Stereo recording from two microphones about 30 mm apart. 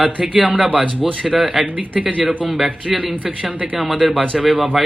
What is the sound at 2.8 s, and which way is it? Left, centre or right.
Speech, centre.